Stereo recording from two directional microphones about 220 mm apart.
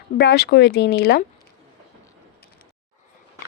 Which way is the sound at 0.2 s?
50° left (ahead or behind).